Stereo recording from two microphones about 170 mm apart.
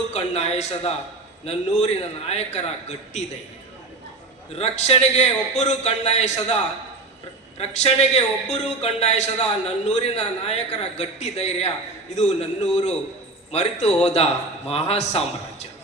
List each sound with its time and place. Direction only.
0.1 s a man's voice: 40° left (ahead or behind)
4.5 s a man's voice: 40° left (ahead or behind)
7.6 s a man's voice: 40° left (ahead or behind)